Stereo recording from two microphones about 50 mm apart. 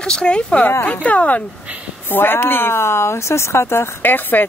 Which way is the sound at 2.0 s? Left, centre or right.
Left.